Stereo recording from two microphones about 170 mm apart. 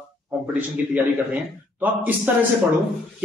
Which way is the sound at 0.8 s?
10° right (ahead or behind).